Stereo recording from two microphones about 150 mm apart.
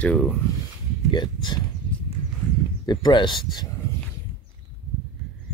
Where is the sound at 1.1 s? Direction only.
30° left (ahead or behind).